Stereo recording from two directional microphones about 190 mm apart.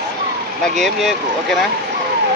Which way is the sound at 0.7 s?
Centre (ahead or behind).